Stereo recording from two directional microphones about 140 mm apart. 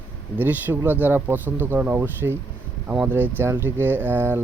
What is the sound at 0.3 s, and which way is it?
Speech, 15° right (ahead or behind).